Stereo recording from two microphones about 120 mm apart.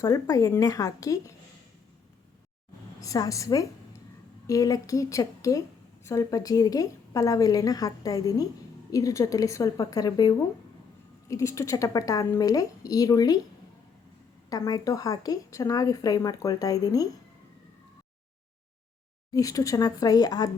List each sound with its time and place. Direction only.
0.0 s a woman's voice: 25° left (ahead or behind)
3.0 s a woman's voice: 30° left (ahead or behind)
14.5 s speech: 30° left (ahead or behind)
19.3 s speech: 30° left (ahead or behind)